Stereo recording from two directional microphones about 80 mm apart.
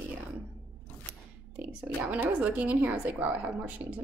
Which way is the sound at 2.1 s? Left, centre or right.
Centre.